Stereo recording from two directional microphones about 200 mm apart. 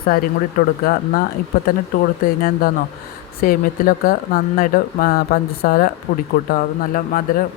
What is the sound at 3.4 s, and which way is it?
Speech, 45° left (ahead or behind).